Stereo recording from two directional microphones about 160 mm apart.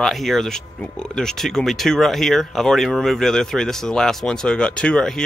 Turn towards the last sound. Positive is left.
turn(degrees=5)  # may be behind; listen again after turning